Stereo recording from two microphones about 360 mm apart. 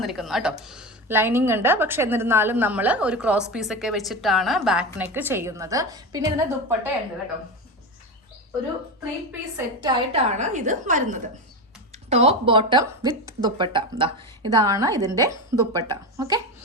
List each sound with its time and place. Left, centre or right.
0.0 s a woman's voice: centre
9.6 s a woman's voice: centre